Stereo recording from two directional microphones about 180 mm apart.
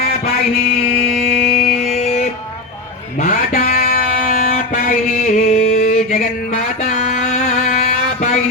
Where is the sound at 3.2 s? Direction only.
50° left (ahead or behind).